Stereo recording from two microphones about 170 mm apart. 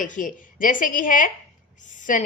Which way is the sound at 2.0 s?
50° left (ahead or behind).